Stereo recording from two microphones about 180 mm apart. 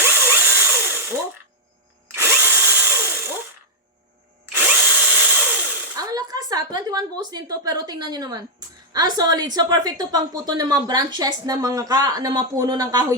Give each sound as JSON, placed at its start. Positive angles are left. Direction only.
{"t": 0.0, "sound": "drill", "side_deg": -10}
{"t": 2.1, "sound": "drill", "side_deg": -15}
{"t": 4.5, "sound": "drill", "side_deg": -10}
{"t": 6.0, "sound": "a woman's voice", "side_deg": -20}